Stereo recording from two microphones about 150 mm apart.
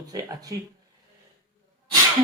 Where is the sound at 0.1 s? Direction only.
25° right (ahead or behind).